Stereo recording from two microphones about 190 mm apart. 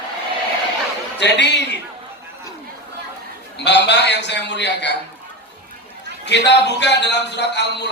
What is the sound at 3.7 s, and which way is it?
A man's voice, 65° left (ahead or behind).